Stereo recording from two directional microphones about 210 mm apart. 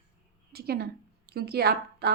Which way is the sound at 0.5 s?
50° right (ahead or behind).